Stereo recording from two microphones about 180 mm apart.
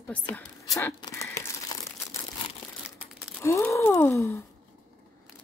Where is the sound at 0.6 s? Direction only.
20° left (ahead or behind).